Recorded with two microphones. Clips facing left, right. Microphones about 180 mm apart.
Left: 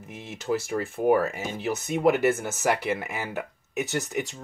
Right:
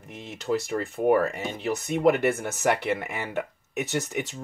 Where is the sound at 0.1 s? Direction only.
Centre (ahead or behind).